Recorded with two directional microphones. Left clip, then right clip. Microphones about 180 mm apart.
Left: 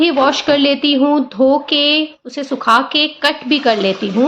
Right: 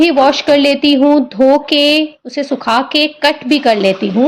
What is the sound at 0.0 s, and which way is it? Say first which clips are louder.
A woman's voice: right 3 dB; 35° right (ahead or behind).